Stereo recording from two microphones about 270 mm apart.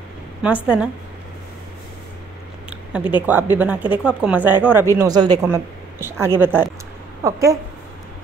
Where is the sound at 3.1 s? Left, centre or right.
Centre.